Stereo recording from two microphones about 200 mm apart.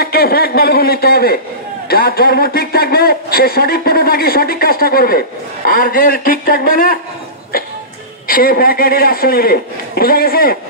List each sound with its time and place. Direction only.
0.0 s a man's voice: 50° left (ahead or behind)
8.3 s a man's voice: 45° left (ahead or behind)